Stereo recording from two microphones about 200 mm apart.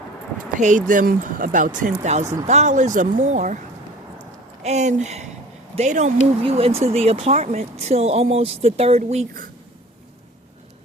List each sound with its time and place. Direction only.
0.9 s speech: 40° right (ahead or behind)
2.2 s speech: 20° right (ahead or behind)
2.5 s speech: 35° right (ahead or behind)
4.6 s speech: 35° right (ahead or behind)